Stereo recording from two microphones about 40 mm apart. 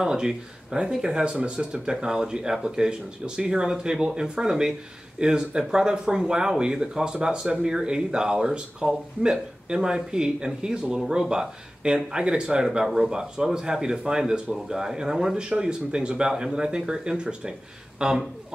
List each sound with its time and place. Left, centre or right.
0.0 s speech: centre
12.6 s speech: centre
15.3 s speech: right